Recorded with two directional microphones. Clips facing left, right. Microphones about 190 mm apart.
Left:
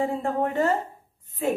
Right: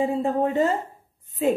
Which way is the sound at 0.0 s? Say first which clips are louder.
Right 3 dB; 15° right (ahead or behind).